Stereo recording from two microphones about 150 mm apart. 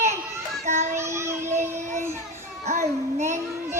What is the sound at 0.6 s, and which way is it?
Child singing, 50° right (ahead or behind).